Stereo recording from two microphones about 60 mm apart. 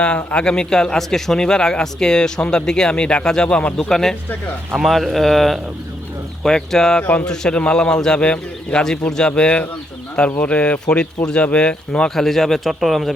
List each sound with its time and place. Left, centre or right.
0.3 s speech: centre
3.8 s speech: centre
4.7 s a man's voice: centre
12.1 s a man's voice: centre